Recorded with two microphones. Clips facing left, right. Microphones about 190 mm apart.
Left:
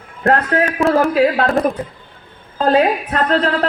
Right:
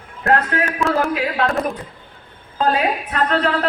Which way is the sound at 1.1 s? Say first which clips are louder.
Left 6 dB; 35° left (ahead or behind).